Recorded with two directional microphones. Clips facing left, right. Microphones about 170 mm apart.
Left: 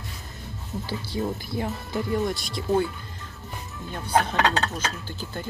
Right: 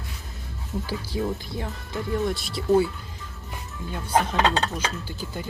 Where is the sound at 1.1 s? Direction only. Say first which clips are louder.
Right 1 dB; 5° right (ahead or behind).